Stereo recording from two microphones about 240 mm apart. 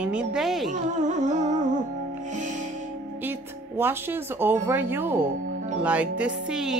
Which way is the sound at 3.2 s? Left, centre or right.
Centre.